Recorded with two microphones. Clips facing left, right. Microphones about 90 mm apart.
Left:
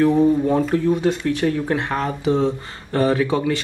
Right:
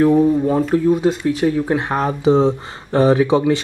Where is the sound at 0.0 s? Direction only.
10° right (ahead or behind).